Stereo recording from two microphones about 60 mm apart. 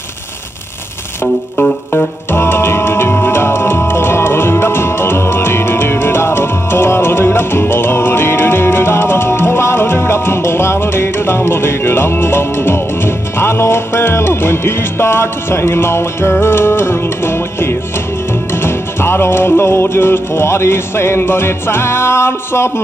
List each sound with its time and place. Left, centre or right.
2.3 s music: left